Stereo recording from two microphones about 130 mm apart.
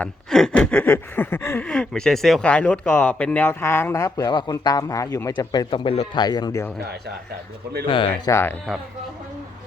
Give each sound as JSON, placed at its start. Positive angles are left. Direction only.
{"t": 0.0, "sound": "a sound", "side_deg": 5}
{"t": 6.1, "sound": "speech", "side_deg": 30}
{"t": 7.9, "sound": "speech", "side_deg": 40}
{"t": 8.3, "sound": "speech", "side_deg": 20}